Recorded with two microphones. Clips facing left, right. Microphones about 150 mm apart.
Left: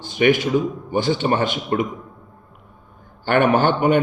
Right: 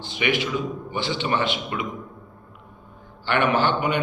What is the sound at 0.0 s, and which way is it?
A man's voice, 45° left (ahead or behind).